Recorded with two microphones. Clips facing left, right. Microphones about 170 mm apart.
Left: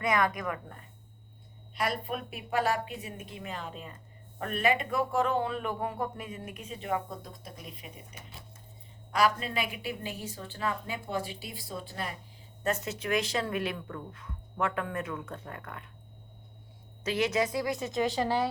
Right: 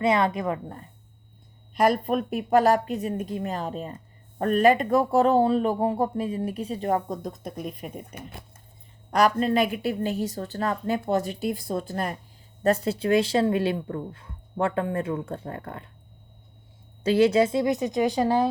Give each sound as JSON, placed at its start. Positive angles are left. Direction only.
{"t": 0.0, "sound": "a woman's voice", "side_deg": -25}
{"t": 1.7, "sound": "speech", "side_deg": -45}
{"t": 9.1, "sound": "a woman's voice", "side_deg": -45}
{"t": 12.6, "sound": "speech", "side_deg": -35}
{"t": 17.0, "sound": "a woman's voice", "side_deg": -30}